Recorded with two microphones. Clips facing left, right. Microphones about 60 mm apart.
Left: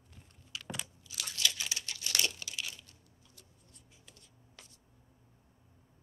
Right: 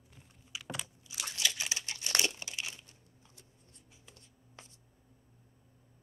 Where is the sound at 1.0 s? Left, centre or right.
Right.